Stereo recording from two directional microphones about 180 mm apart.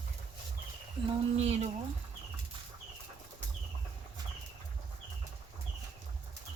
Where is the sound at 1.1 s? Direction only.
35° right (ahead or behind).